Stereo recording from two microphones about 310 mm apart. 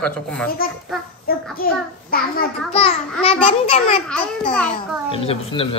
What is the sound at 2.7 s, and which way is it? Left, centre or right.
Speech, centre.